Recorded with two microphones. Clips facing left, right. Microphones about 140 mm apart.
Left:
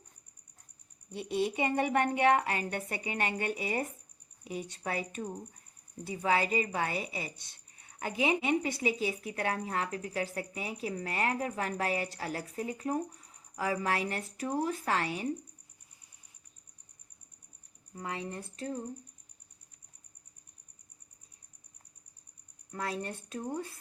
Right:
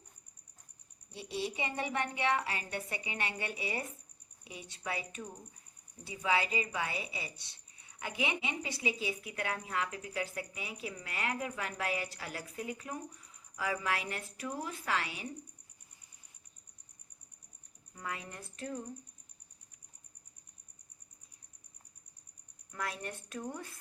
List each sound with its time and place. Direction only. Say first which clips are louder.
1.1 s a woman's voice: left 6 dB; 50° left (ahead or behind)
8.4 s a woman's voice: left 7 dB; 50° left (ahead or behind)
17.9 s speech: left 5 dB; 30° left (ahead or behind)
22.7 s speech: left 4 dB; 30° left (ahead or behind)